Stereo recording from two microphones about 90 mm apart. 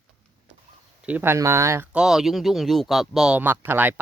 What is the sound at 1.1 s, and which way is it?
Speech, 20° right (ahead or behind).